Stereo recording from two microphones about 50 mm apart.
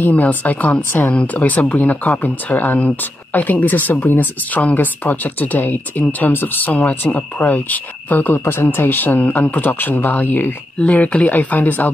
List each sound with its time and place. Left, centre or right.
0.3 s speech: left
7.0 s speech: left
10.8 s speech: left